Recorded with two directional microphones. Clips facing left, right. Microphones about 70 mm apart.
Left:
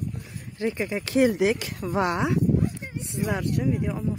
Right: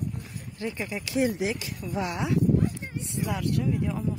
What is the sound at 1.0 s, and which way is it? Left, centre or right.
Speech, left.